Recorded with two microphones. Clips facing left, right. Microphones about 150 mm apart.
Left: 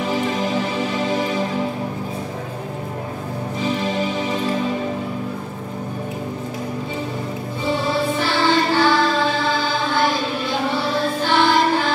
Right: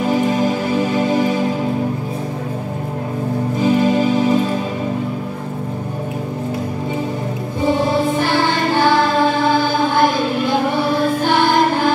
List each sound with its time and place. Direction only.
0.1 s music: 45° right (ahead or behind)
3.5 s music: 45° right (ahead or behind)
7.6 s music: 50° right (ahead or behind)